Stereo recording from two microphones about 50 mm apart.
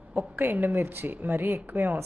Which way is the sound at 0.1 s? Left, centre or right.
Right.